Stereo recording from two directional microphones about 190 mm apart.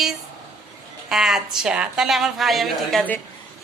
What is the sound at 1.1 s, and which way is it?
A woman's voice, 5° right (ahead or behind).